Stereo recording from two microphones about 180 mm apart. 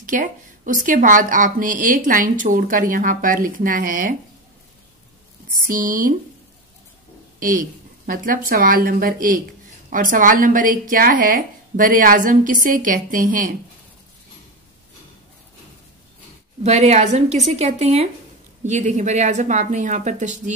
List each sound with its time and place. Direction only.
0.0 s speech: 45° right (ahead or behind)
5.6 s speech: 50° right (ahead or behind)
7.3 s speech: 50° right (ahead or behind)
16.6 s a woman's voice: 40° right (ahead or behind)